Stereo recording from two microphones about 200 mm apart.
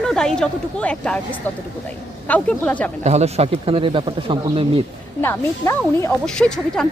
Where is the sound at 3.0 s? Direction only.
35° right (ahead or behind).